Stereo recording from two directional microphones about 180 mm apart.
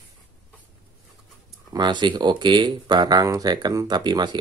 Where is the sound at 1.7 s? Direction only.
25° right (ahead or behind).